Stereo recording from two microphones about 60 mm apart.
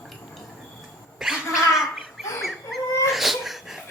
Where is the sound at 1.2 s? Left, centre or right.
Centre.